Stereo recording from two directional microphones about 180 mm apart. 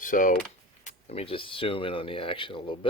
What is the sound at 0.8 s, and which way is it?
Speech, 35° left (ahead or behind).